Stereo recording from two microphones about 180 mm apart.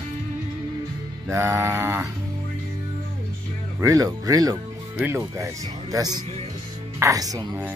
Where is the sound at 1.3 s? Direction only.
15° right (ahead or behind).